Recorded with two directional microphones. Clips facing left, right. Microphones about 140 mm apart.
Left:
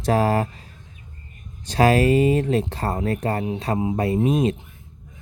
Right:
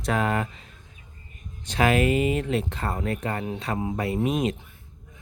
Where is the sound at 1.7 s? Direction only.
35° left (ahead or behind).